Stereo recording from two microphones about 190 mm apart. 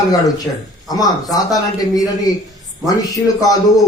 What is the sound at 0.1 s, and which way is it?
A man's voice, 20° left (ahead or behind).